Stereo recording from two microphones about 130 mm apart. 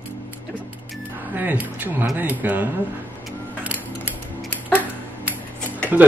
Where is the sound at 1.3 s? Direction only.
15° right (ahead or behind).